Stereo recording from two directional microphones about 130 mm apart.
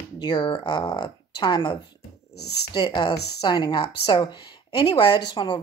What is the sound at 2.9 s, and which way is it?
Speech, 35° left (ahead or behind).